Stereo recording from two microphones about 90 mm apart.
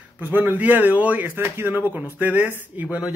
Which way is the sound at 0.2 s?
20° right (ahead or behind).